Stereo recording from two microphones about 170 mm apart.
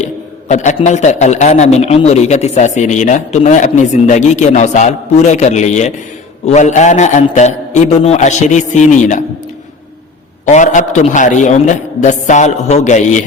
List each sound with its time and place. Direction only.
0.0 s a sound: 45° left (ahead or behind)
0.8 s speech: 45° left (ahead or behind)
10.4 s speech: 45° left (ahead or behind)